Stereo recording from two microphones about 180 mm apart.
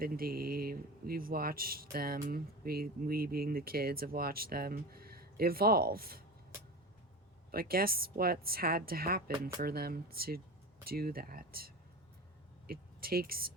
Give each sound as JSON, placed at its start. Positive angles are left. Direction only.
{"t": 0.0, "sound": "speech", "side_deg": -55}
{"t": 7.5, "sound": "speech", "side_deg": -55}